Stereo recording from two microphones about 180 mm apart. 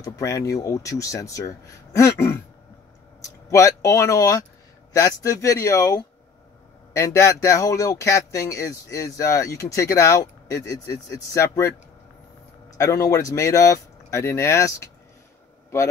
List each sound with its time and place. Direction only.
0.0 s speech: 20° left (ahead or behind)
3.4 s speech: 15° left (ahead or behind)